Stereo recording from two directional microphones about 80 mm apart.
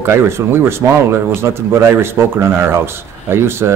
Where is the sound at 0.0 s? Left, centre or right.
Right.